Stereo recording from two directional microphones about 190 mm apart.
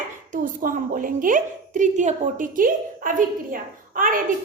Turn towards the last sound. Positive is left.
turn(degrees=-45)  # may be behind; listen again after turning